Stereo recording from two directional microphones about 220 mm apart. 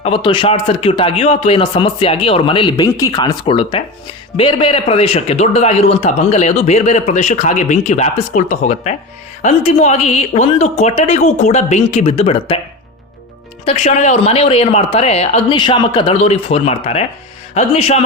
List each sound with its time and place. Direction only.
0.0 s a man's voice: 25° left (ahead or behind)
13.7 s speech: 30° left (ahead or behind)